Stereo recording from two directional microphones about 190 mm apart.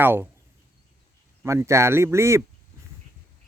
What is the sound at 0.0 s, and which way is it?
Speech, 10° right (ahead or behind).